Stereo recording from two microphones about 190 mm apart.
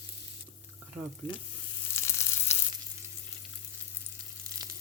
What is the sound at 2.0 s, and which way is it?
Frying, 15° left (ahead or behind).